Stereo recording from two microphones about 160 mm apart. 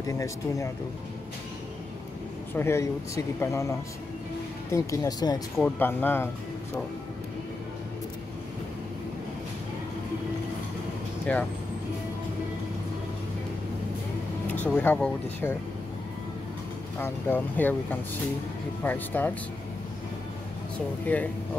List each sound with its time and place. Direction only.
0.0 s speech: 20° left (ahead or behind)
2.5 s speech: 15° left (ahead or behind)
5.6 s speech: 10° left (ahead or behind)
11.3 s speech: 5° left (ahead or behind)
14.5 s speech: 10° left (ahead or behind)
17.0 s speech: 10° left (ahead or behind)
18.9 s speech: 10° left (ahead or behind)
21.1 s speech: 10° left (ahead or behind)